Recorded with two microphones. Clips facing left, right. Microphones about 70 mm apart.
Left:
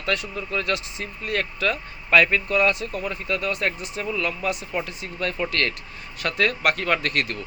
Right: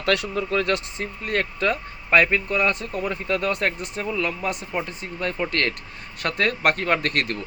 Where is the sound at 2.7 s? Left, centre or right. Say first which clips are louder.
Right 1 dB; right.